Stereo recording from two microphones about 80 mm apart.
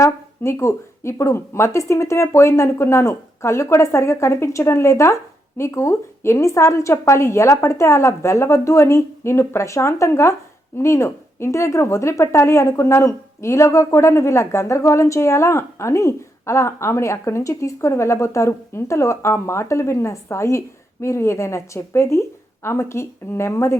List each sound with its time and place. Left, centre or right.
0.0 s a woman's voice: left